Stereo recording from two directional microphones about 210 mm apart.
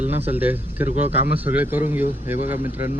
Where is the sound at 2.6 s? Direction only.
40° left (ahead or behind).